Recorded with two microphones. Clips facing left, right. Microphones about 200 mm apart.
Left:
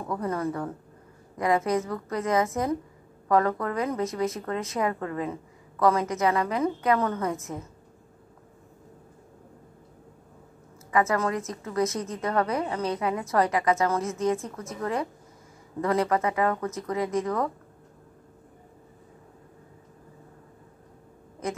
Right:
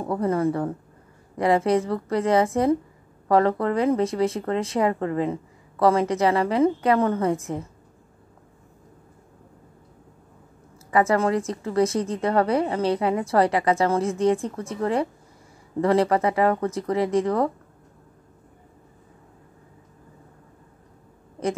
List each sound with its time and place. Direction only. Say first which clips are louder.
0.0 s a woman's voice: right 6 dB; 30° right (ahead or behind)
10.9 s speech: right 4 dB; 30° right (ahead or behind)